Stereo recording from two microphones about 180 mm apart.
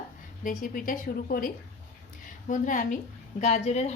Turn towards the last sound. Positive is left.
turn(degrees=35)  # may be behind; listen again after turning